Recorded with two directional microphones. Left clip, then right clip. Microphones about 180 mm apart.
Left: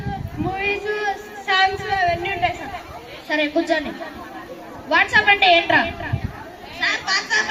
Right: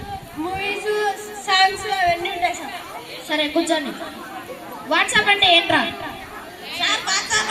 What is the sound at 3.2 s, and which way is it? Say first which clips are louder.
Speech: even; 70° right (ahead or behind).